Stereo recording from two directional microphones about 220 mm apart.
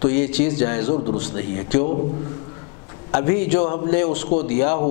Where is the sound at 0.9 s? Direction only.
35° left (ahead or behind).